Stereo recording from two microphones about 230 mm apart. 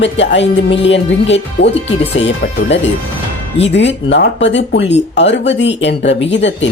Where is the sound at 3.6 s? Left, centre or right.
Left.